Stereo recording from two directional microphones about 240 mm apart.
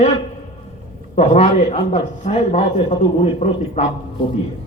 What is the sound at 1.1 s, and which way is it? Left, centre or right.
A man's voice, left.